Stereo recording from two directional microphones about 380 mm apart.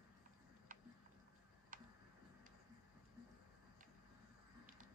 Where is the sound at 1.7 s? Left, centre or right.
Right.